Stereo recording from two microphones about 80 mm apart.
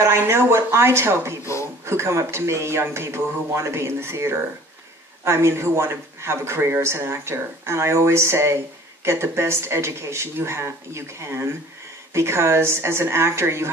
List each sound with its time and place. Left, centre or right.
0.0 s speech: right
1.4 s a sound: left
1.9 s speech: right